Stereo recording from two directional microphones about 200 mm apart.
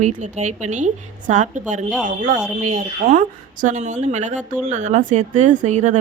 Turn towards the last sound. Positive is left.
turn(degrees=-35)  # may be behind; listen again after turning